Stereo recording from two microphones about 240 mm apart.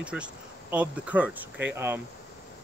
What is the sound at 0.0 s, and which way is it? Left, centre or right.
Speech, centre.